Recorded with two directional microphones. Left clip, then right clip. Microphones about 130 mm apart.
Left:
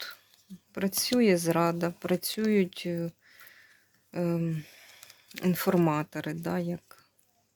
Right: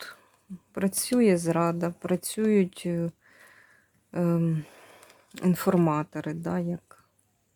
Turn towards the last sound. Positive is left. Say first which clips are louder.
# right 1 dB
turn(degrees=-20)  # may be behind; listen again after turning